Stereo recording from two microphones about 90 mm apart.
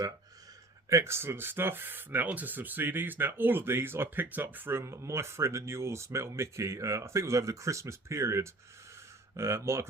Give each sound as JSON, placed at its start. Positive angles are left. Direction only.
{"t": 0.9, "sound": "speech", "side_deg": -30}